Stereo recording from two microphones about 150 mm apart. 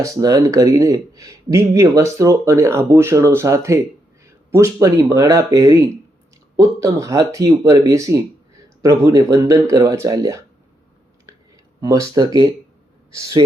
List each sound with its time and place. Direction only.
0.0 s speech: 25° right (ahead or behind)
11.8 s speech: 20° right (ahead or behind)